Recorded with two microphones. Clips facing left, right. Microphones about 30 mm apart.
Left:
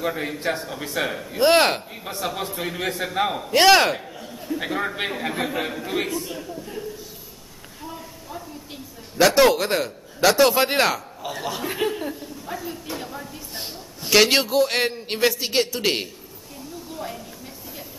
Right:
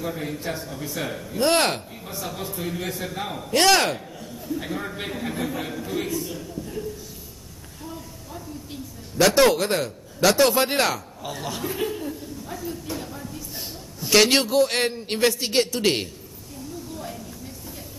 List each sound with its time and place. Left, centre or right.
0.0 s a man's voice: left
2.0 s a man's voice: left
4.5 s a man's voice: left
6.1 s a man's voice: centre
7.8 s a sound: centre
9.2 s a man's voice: centre
11.6 s a sound: left
14.1 s a man's voice: centre
16.9 s a sound: centre